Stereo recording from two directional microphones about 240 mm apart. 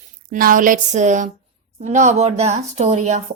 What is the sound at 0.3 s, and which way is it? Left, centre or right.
A woman's voice, right.